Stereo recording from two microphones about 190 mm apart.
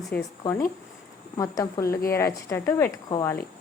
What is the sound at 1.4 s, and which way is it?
Speech, 15° left (ahead or behind).